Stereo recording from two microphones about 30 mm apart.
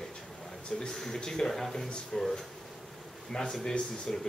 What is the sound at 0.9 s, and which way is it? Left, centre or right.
A man's voice, centre.